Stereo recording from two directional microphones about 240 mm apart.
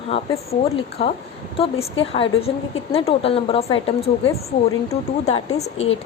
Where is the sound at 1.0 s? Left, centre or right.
Left.